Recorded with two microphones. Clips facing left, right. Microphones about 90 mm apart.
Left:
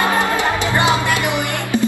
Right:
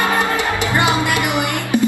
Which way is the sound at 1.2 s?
20° right (ahead or behind).